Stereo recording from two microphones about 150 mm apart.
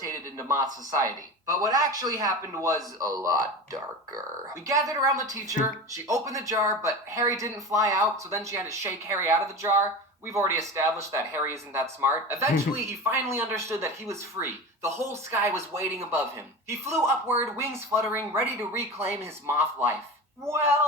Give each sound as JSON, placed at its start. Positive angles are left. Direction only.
{"t": 0.0, "sound": "a sound", "side_deg": -20}
{"t": 0.6, "sound": "speech", "side_deg": -25}
{"t": 4.6, "sound": "speech", "side_deg": -25}